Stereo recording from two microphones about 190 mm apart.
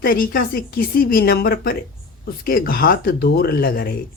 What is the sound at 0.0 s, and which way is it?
Speech, 50° left (ahead or behind).